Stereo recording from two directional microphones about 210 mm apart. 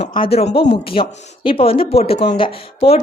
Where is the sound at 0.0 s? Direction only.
25° left (ahead or behind).